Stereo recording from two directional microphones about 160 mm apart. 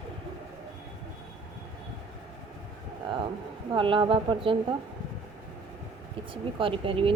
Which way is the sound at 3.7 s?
30° right (ahead or behind).